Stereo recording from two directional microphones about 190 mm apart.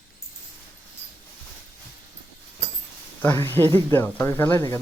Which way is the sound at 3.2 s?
10° left (ahead or behind).